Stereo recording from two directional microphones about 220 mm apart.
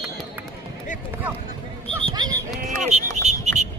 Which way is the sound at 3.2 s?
30° right (ahead or behind).